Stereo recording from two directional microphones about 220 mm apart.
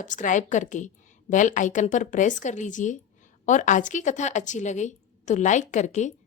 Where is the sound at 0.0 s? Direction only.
35° left (ahead or behind).